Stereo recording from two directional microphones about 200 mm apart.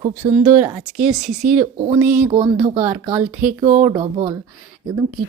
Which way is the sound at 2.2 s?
25° right (ahead or behind).